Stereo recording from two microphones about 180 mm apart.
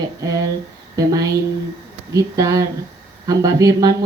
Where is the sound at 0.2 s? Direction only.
20° right (ahead or behind).